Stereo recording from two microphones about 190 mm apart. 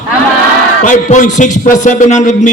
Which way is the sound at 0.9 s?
40° left (ahead or behind).